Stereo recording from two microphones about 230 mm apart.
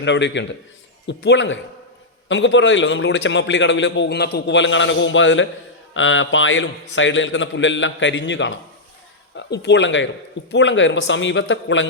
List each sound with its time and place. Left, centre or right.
0.0 s a man's voice: left